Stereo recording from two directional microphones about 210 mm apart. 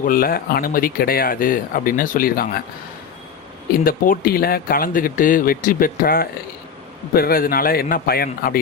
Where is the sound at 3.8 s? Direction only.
40° left (ahead or behind).